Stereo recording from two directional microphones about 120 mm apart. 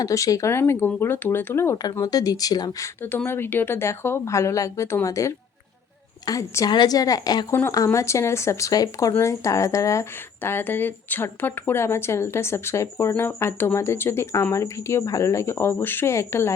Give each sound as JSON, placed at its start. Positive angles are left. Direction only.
{"t": 0.0, "sound": "a woman's voice", "side_deg": 30}